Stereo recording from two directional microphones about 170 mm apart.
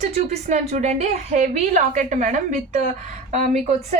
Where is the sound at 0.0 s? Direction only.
40° right (ahead or behind).